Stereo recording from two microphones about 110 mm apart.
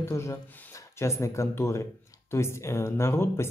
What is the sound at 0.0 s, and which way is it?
Speech, 25° left (ahead or behind).